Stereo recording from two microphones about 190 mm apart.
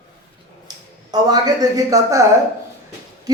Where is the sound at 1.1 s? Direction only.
20° right (ahead or behind).